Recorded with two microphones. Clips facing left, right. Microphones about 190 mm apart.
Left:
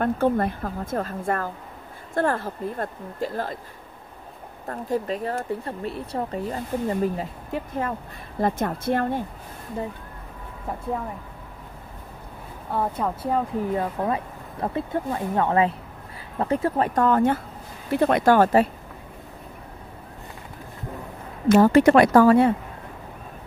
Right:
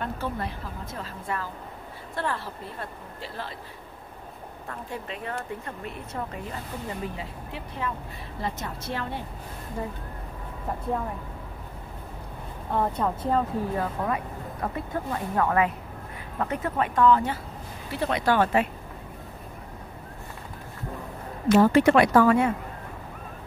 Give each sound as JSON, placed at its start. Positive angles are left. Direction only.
{"t": 0.0, "sound": "a woman's voice", "side_deg": 50}
{"t": 4.6, "sound": "a woman's voice", "side_deg": 40}
{"t": 12.7, "sound": "a woman's voice", "side_deg": 5}
{"t": 13.7, "sound": "a woman's voice", "side_deg": 25}
{"t": 21.5, "sound": "a woman's voice", "side_deg": 45}